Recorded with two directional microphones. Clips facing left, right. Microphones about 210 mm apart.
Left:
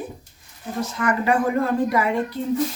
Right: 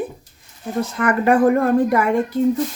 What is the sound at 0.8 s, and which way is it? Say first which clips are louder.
A woman's voice: right 4 dB; 55° right (ahead or behind).